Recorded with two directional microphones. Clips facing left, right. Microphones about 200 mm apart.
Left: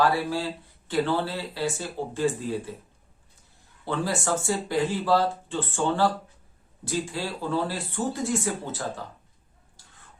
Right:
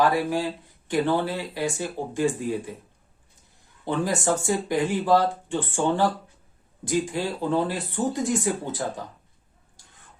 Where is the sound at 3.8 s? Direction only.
15° right (ahead or behind).